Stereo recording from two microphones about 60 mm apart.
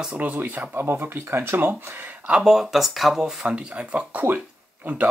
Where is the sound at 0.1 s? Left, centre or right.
Right.